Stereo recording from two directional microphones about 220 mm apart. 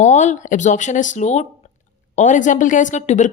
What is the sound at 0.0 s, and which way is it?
A woman's voice, 30° left (ahead or behind).